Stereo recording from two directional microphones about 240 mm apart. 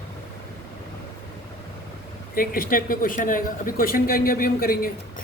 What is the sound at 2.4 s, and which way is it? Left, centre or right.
Speech, left.